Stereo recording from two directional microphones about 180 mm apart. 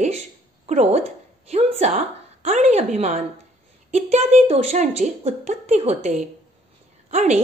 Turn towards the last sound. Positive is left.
turn(degrees=-40)  # may be behind; listen again after turning